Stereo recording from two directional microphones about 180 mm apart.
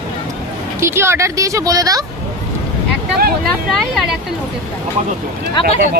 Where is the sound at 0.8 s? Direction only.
15° right (ahead or behind).